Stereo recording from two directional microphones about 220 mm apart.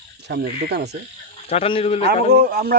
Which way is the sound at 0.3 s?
50° right (ahead or behind).